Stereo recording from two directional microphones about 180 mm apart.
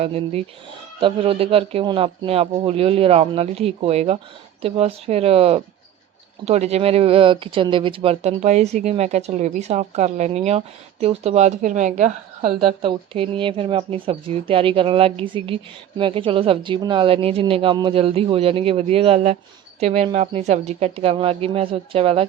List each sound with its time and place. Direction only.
0.0 s speech: 35° right (ahead or behind)
12.6 s speech: 30° right (ahead or behind)